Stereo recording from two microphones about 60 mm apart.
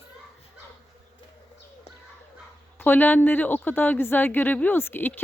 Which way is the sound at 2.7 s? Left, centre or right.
Left.